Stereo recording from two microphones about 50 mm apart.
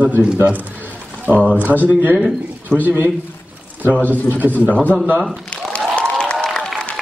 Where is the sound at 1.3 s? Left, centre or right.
Right.